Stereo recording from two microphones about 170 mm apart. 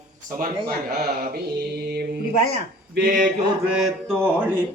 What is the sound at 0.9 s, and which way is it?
Mantra, 65° right (ahead or behind).